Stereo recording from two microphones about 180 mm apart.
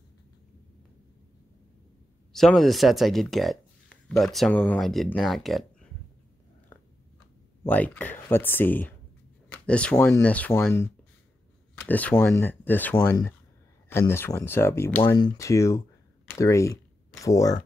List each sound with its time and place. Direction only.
2.3 s speech: centre (ahead or behind)
7.6 s speech: 10° left (ahead or behind)